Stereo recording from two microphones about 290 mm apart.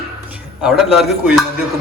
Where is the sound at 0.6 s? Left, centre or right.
Centre.